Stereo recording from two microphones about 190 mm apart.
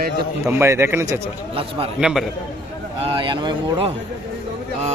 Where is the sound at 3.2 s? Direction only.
25° right (ahead or behind).